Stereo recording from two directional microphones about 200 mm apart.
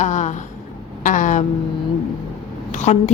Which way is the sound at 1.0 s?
40° left (ahead or behind).